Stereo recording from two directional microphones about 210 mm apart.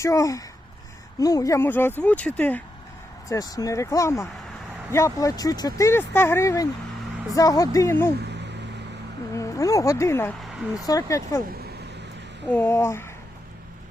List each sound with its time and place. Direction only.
0.0 s speech: 15° left (ahead or behind)
9.3 s speech: 15° left (ahead or behind)
12.5 s speech: 10° left (ahead or behind)